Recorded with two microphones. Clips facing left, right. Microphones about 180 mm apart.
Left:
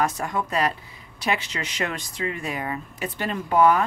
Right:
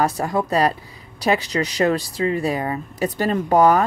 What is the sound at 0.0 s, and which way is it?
Speech, 35° right (ahead or behind).